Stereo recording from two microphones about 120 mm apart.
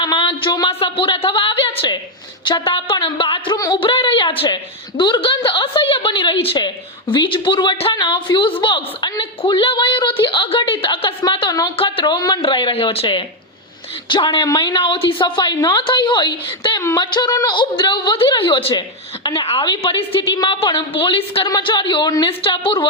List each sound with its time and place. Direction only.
0.0 s a woman's voice: 35° left (ahead or behind)
11.8 s a woman's voice: 45° left (ahead or behind)
22.3 s a woman's voice: 50° left (ahead or behind)